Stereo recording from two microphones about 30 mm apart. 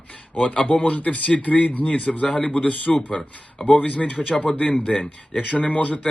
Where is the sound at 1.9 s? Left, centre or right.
Left.